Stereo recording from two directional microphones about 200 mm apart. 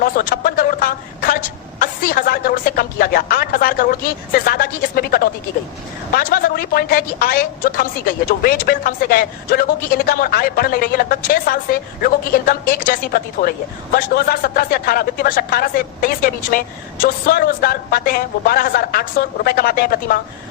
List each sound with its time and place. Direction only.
0.0 s a woman's voice: 45° left (ahead or behind)